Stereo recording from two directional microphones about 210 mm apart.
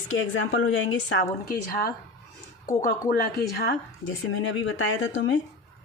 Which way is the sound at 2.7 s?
40° left (ahead or behind).